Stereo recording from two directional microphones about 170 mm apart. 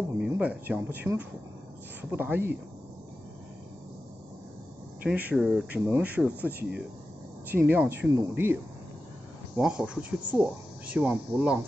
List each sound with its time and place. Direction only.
0.3 s speech: 10° right (ahead or behind)
5.0 s speech: 10° right (ahead or behind)
9.6 s speech: 5° right (ahead or behind)